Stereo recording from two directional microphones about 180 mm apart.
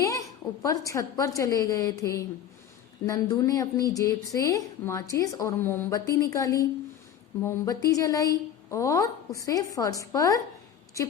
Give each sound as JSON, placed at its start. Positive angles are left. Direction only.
{"t": 0.6, "sound": "a woman's voice", "side_deg": 20}